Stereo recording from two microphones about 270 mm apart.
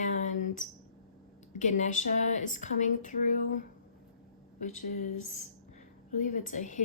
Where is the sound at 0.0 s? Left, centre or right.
Left.